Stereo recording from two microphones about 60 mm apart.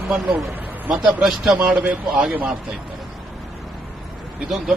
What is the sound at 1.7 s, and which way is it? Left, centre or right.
Speech, right.